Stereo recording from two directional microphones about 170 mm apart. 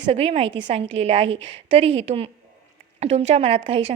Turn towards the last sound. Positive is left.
turn(degrees=-35)  # may be behind; listen again after turning